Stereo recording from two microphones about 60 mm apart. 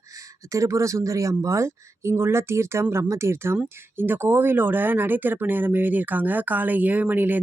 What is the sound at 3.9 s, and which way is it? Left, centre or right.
Speech, right.